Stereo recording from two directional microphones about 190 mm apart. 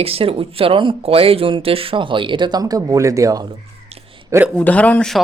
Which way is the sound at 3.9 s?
30° right (ahead or behind).